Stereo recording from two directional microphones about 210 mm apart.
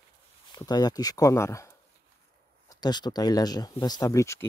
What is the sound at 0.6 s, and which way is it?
Speech, 20° left (ahead or behind).